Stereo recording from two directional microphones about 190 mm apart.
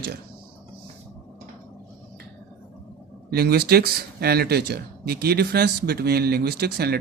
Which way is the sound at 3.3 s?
55° right (ahead or behind).